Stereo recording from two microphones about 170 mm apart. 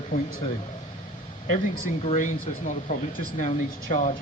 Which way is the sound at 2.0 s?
45° left (ahead or behind).